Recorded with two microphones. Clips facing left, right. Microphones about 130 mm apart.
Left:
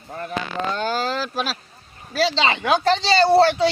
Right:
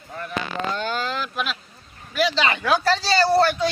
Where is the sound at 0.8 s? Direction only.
40° left (ahead or behind).